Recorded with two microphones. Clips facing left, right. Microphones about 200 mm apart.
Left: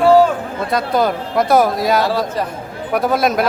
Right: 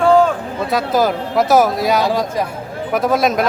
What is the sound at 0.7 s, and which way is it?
Speech, centre (ahead or behind).